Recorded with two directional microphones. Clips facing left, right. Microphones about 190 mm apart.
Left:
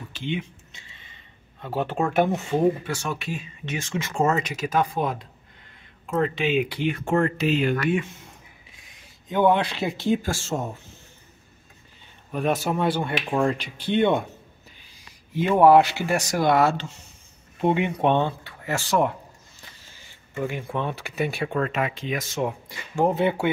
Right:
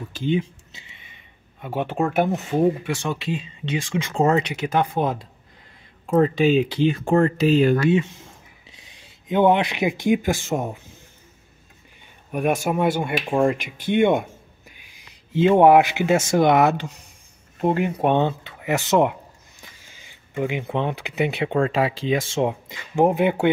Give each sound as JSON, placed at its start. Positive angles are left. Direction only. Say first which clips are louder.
{"t": 0.1, "sound": "speech", "louder": "right 7 dB", "side_deg": -40}
{"t": 0.8, "sound": "a sound", "louder": "right 1 dB", "side_deg": -15}
{"t": 2.0, "sound": "speech", "louder": "right 1 dB", "side_deg": 0}
{"t": 2.8, "sound": "speech", "louder": "right 3 dB", "side_deg": -20}
{"t": 6.0, "sound": "speech", "louder": "right 6 dB", "side_deg": -40}
{"t": 9.0, "sound": "speech", "louder": "right 3 dB", "side_deg": -20}
{"t": 12.3, "sound": "speech", "louder": "right 2 dB", "side_deg": -10}
{"t": 14.9, "sound": "speech", "louder": "right 8 dB", "side_deg": -20}
{"t": 17.6, "sound": "speech", "louder": "right 1 dB", "side_deg": 0}
{"t": 18.2, "sound": "speech", "louder": "right 4 dB", "side_deg": -20}